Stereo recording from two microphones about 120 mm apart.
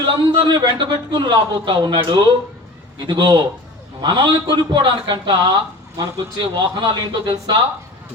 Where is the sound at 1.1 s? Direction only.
35° right (ahead or behind).